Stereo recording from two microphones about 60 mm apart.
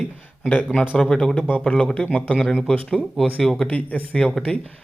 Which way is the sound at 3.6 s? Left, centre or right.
Left.